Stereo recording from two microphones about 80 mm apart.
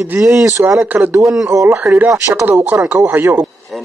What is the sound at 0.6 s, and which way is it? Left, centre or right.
Speech, centre.